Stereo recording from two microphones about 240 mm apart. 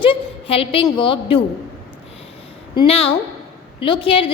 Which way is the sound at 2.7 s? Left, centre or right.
Left.